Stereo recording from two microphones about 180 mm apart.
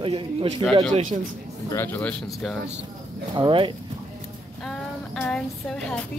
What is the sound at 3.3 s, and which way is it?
Speech, 25° right (ahead or behind).